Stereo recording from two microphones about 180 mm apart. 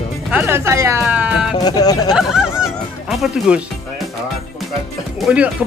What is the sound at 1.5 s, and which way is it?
Speech, 20° left (ahead or behind).